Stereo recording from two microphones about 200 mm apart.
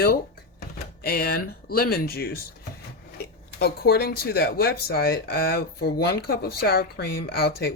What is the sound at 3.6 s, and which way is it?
Speech, 50° left (ahead or behind).